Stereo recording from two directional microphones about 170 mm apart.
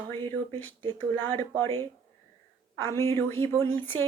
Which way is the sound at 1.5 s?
15° left (ahead or behind).